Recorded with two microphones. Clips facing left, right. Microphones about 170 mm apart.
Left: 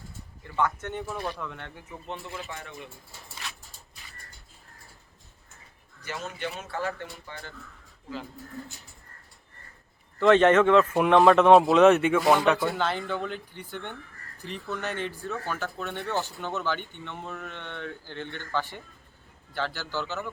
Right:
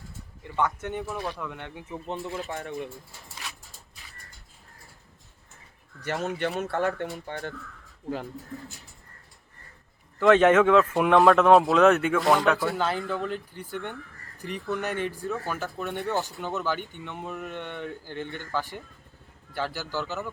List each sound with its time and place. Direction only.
0.4 s speech: 15° right (ahead or behind)
2.5 s speech: 45° right (ahead or behind)
6.0 s speech: 65° right (ahead or behind)
10.2 s speech: 5° right (ahead or behind)